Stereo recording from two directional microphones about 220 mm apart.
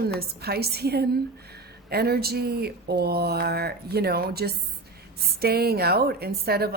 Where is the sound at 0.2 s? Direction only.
45° right (ahead or behind).